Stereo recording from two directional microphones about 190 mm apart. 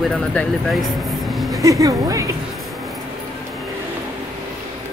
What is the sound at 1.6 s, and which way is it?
Speech, 15° right (ahead or behind).